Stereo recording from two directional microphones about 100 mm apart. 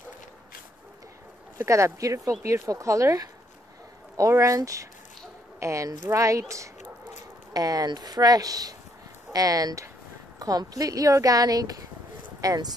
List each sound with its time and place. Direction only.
1.6 s a woman's voice: 30° right (ahead or behind)